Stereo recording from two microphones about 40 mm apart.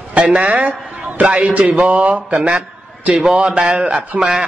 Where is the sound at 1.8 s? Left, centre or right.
Right.